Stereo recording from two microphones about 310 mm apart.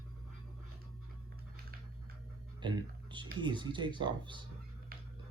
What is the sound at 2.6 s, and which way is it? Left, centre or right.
Speech, centre.